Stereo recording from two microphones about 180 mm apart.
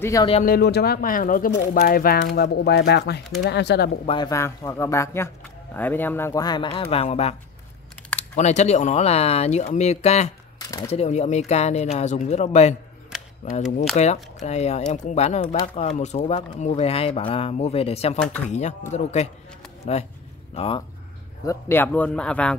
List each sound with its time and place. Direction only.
0.0 s speech: 20° left (ahead or behind)
0.4 s speech: 60° left (ahead or behind)
4.0 s speech: 30° left (ahead or behind)
4.3 s speech: 15° left (ahead or behind); by 10.3 s 35° left (ahead or behind)
10.6 s a sound: 20° left (ahead or behind)
10.9 s speech: 35° left (ahead or behind)
13.9 s speech: 40° left (ahead or behind)
21.5 s speech: 10° left (ahead or behind)